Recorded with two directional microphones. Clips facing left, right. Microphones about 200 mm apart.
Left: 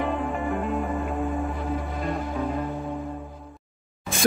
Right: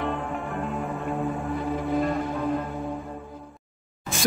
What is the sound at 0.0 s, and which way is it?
Music, centre (ahead or behind).